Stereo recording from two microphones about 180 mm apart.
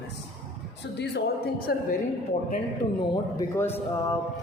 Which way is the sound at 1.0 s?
65° left (ahead or behind).